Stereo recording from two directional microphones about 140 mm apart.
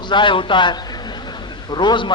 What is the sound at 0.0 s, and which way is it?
A man's voice, 35° left (ahead or behind).